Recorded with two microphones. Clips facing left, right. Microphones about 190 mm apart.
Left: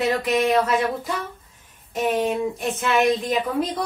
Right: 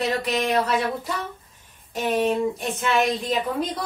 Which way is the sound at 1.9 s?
Centre (ahead or behind).